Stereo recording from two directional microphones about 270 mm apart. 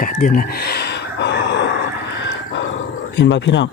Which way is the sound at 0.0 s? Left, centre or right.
Left.